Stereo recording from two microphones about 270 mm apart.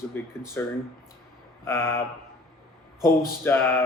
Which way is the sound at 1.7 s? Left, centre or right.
Centre.